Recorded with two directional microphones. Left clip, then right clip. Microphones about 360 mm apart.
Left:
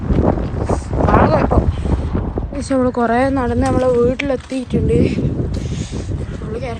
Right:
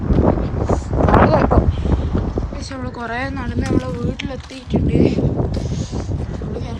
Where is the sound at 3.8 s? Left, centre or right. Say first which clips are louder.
Left 10 dB; centre.